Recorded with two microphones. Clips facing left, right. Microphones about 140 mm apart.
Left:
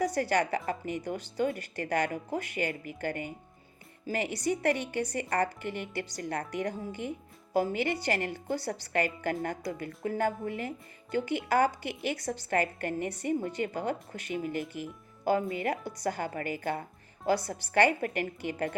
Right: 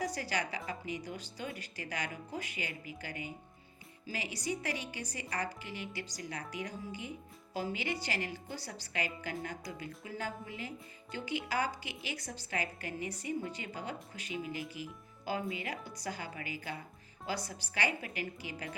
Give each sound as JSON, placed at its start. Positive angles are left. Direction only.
{"t": 0.0, "sound": "a woman's voice", "side_deg": 50}